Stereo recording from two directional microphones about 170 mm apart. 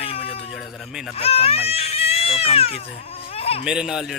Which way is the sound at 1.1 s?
35° left (ahead or behind).